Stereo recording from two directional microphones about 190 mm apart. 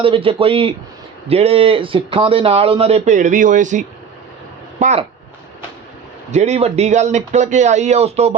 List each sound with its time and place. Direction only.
0.0 s speech: 30° right (ahead or behind)
6.3 s speech: 35° right (ahead or behind)